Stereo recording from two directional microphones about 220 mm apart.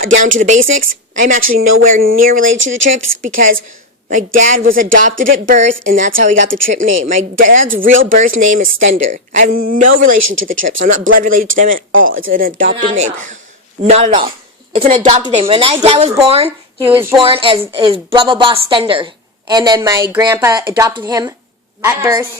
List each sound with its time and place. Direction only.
0.2 s speech: 35° right (ahead or behind)
2.4 s speech: 60° right (ahead or behind)
3.2 s speech: 40° right (ahead or behind)
6.3 s speech: 60° right (ahead or behind)
7.3 s speech: 35° right (ahead or behind)
8.6 s speech: 65° right (ahead or behind)
9.0 s speech: 35° right (ahead or behind)
10.2 s speech: 60° right (ahead or behind)
10.6 s speech: 35° right (ahead or behind)
11.9 s speech: 65° right (ahead or behind)
12.3 s a woman's voice: 40° right (ahead or behind); by 22.3 s 10° right (ahead or behind)